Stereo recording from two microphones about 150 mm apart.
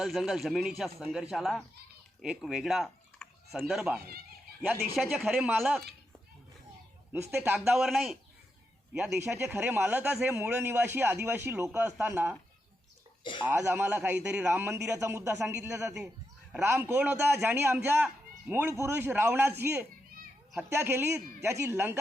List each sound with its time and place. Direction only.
0.0 s a man's voice: centre (ahead or behind)
7.1 s speech: 15° right (ahead or behind)
7.7 s a man's voice: 5° right (ahead or behind)
13.4 s speech: 15° right (ahead or behind)
16.6 s speech: 15° right (ahead or behind)